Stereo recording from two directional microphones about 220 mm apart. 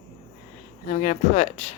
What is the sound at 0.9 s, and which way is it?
Speech, 35° left (ahead or behind).